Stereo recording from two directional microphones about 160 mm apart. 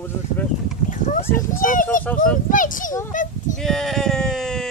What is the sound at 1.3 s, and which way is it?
A child's voice, 55° left (ahead or behind).